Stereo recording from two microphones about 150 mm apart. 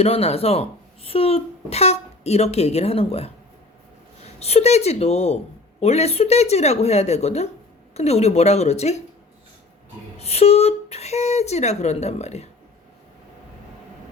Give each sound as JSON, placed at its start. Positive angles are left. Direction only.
{"t": 0.0, "sound": "speech", "side_deg": 40}
{"t": 4.4, "sound": "speech", "side_deg": 45}
{"t": 10.2, "sound": "speech", "side_deg": 45}